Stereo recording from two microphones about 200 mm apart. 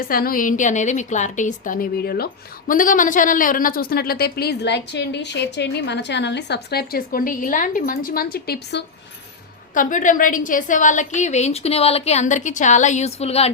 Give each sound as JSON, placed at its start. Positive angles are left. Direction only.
{"t": 0.0, "sound": "a woman's voice", "side_deg": 45}
{"t": 9.7, "sound": "a woman's voice", "side_deg": 40}